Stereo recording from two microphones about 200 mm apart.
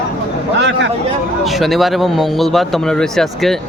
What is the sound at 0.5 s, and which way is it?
Speech, 60° right (ahead or behind).